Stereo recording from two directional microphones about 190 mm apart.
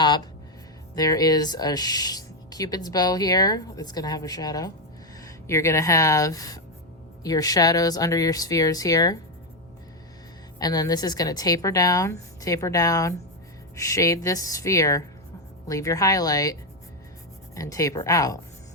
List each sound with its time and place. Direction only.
0.9 s speech: 20° left (ahead or behind)
10.6 s speech: 20° left (ahead or behind)